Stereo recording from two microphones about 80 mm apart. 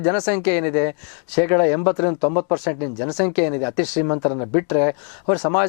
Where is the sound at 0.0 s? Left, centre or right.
Centre.